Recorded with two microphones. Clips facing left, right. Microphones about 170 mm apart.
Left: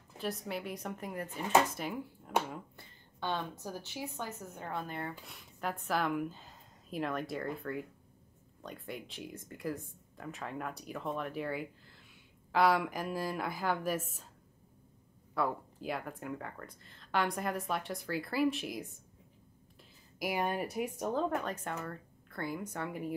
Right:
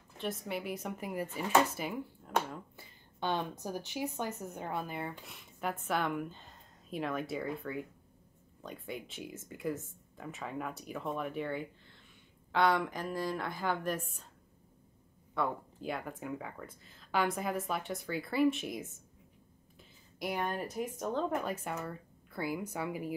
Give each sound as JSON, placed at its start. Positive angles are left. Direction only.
{"t": 0.2, "sound": "speech", "side_deg": 0}
{"t": 3.2, "sound": "a woman's voice", "side_deg": -15}
{"t": 15.3, "sound": "speech", "side_deg": 0}
{"t": 20.2, "sound": "speech", "side_deg": 5}
{"t": 21.4, "sound": "a woman's voice", "side_deg": -10}